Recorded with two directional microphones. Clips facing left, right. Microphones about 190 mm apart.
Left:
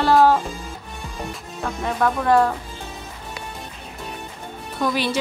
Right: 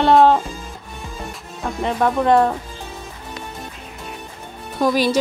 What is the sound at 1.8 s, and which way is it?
Speech, 20° right (ahead or behind).